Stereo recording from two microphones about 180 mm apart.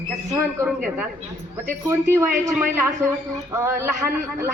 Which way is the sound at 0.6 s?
5° right (ahead or behind).